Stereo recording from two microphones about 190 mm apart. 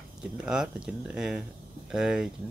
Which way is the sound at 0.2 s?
5° right (ahead or behind).